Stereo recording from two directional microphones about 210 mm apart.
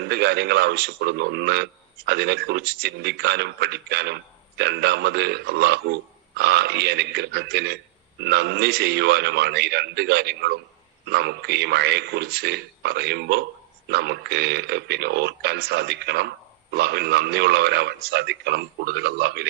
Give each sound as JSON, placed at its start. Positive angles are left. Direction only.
{"t": 0.0, "sound": "a man's voice", "side_deg": -50}